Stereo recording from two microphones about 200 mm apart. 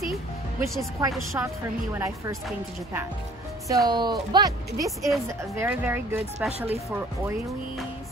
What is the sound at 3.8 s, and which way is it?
Speech, 20° right (ahead or behind).